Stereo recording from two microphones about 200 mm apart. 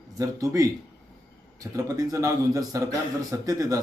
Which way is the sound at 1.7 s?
15° right (ahead or behind).